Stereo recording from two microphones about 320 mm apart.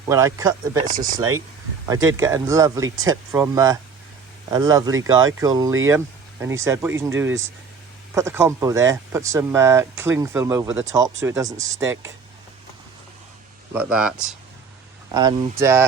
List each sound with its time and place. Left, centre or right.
0.1 s speech: centre
0.8 s speech: right
1.9 s speech: centre
13.7 s speech: centre
15.1 s speech: centre